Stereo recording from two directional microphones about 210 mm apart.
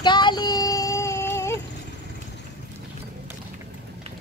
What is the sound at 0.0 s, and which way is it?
Child singing, 20° left (ahead or behind).